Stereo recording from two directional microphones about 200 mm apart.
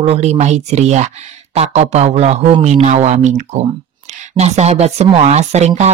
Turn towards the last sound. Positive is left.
turn(degrees=-35)  # may be behind; listen again after turning